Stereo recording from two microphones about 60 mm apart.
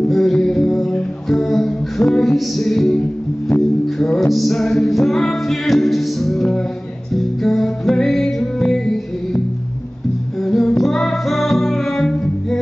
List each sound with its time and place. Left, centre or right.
0.1 s music: centre
4.0 s music: centre
10.4 s child singing: centre
10.8 s music: centre